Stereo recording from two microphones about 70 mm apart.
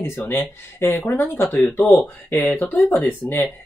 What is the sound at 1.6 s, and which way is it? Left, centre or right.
Speech, centre.